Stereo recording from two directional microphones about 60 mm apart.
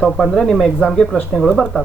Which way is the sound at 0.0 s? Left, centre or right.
Centre.